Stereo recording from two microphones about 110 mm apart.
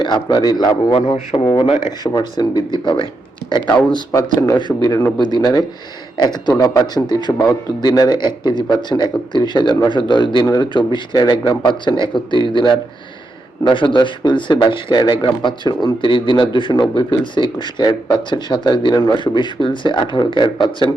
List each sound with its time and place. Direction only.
0.0 s a man's voice: 40° left (ahead or behind)
1.5 s speech: 55° left (ahead or behind)
2.0 s speech: 20° left (ahead or behind)
2.4 s speech: 40° left (ahead or behind)
4.1 s speech: 30° left (ahead or behind)
4.5 s a man's voice: 40° left (ahead or behind)